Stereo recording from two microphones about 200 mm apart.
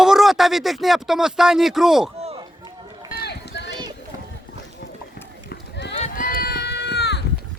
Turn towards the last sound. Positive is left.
turn(degrees=55)  # may be behind; listen again after turning